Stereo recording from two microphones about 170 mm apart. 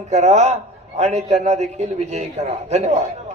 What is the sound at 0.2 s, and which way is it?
Speech, 40° right (ahead or behind).